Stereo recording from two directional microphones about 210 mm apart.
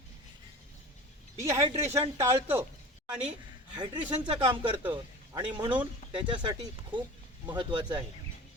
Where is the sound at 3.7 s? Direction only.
20° right (ahead or behind).